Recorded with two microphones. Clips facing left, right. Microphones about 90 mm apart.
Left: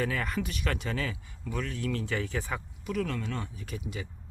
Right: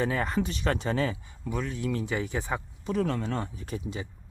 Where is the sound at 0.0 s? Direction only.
30° right (ahead or behind).